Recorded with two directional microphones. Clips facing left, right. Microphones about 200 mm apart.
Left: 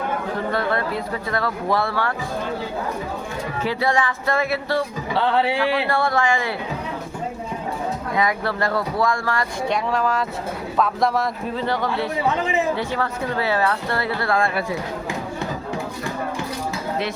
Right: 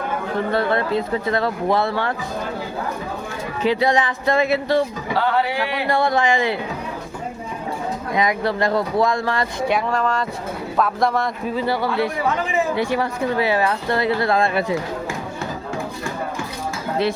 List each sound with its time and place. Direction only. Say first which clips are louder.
0.5 s speech: right 5 dB; 25° right (ahead or behind)
3.6 s speech: right 4 dB; 20° right (ahead or behind)
5.1 s speech: left 1 dB; 25° left (ahead or behind)
5.9 s speech: right 2 dB; 15° right (ahead or behind)
8.1 s speech: right 3 dB; 15° right (ahead or behind)
9.6 s a man's voice: right 1 dB; centre (ahead or behind); by 14.8 s 20° right (ahead or behind)